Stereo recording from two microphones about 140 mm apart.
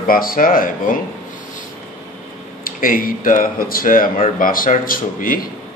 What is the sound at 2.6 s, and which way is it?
A man's voice, 80° left.